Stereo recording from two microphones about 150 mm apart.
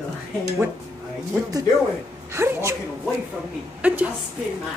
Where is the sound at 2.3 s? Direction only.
20° right (ahead or behind).